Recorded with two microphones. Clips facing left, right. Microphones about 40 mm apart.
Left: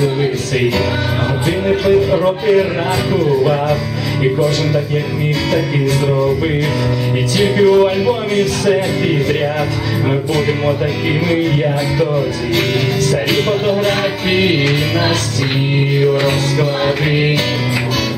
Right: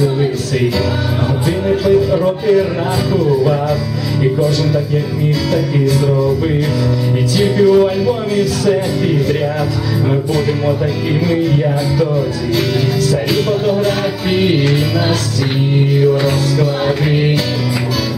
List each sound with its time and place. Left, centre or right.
0.0 s music: left
1.7 s music: left
4.2 s speech: left
5.5 s music: left
7.3 s music: left
13.1 s music: left